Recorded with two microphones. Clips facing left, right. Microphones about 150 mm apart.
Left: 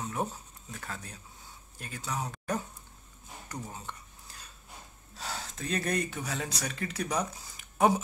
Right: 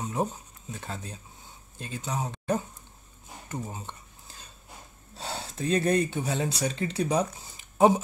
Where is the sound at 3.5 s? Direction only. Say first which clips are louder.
Right 4 dB; 20° right (ahead or behind).